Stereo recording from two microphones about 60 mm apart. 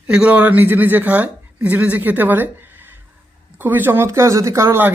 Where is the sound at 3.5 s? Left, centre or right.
Right.